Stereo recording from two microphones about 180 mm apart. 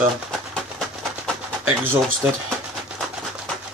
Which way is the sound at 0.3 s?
Centre (ahead or behind).